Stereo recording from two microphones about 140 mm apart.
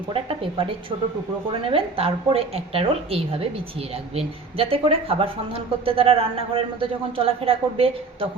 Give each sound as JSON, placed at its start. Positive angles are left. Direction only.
{"t": 0.1, "sound": "a woman's voice", "side_deg": -40}